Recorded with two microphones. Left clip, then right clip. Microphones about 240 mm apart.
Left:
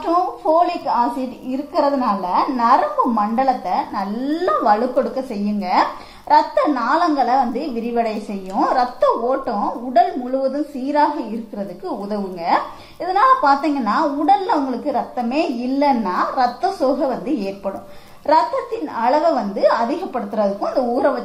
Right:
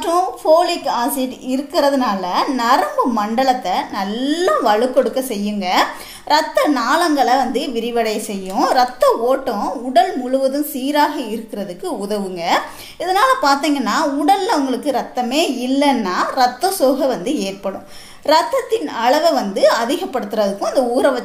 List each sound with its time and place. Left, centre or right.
1.8 s a woman's voice: right
13.0 s a woman's voice: right
18.9 s a woman's voice: right